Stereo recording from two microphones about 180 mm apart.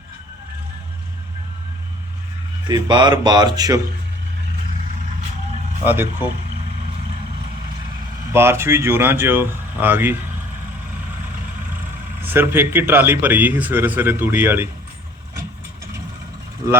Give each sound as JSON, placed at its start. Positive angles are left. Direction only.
{"t": 2.6, "sound": "speech", "side_deg": -25}
{"t": 5.8, "sound": "a man's voice", "side_deg": -10}
{"t": 8.3, "sound": "a man's voice", "side_deg": -15}
{"t": 12.2, "sound": "a man's voice", "side_deg": -10}